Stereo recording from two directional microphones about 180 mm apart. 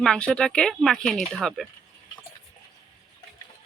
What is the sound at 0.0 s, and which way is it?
Speech, 5° left (ahead or behind).